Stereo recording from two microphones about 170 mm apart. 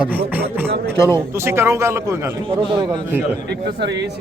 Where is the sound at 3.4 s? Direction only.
80° right.